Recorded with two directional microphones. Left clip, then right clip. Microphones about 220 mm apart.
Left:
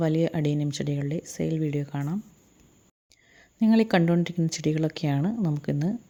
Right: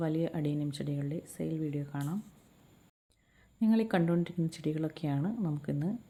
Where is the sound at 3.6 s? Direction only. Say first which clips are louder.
Left 8 dB; 40° left (ahead or behind).